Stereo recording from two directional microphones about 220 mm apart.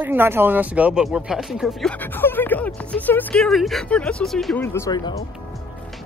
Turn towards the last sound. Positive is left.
turn(degrees=15)  # may be behind; listen again after turning